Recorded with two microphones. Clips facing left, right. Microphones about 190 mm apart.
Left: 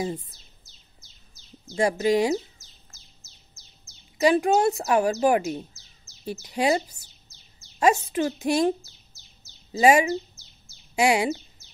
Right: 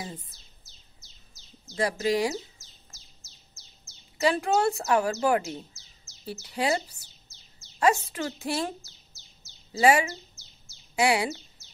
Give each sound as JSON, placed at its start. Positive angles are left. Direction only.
{"t": 1.8, "sound": "a woman's voice", "side_deg": 25}
{"t": 4.2, "sound": "a woman's voice", "side_deg": 20}